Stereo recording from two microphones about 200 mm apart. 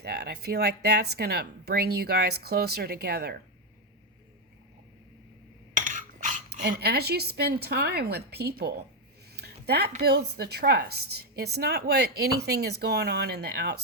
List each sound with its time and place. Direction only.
0.0 s a woman's voice: 50° right (ahead or behind)
5.7 s cutlery: 40° right (ahead or behind)
9.3 s a sound: 55° right (ahead or behind)
10.0 s a woman's voice: 50° right (ahead or behind)